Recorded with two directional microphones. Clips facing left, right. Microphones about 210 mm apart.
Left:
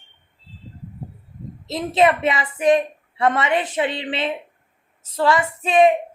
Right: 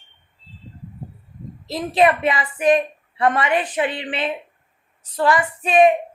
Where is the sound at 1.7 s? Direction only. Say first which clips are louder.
Even; 20° left (ahead or behind).